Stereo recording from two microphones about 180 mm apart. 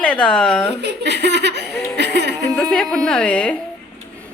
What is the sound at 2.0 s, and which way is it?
Music, 70° right (ahead or behind).